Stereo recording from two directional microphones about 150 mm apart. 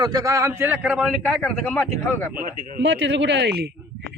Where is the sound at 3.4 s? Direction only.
90° right.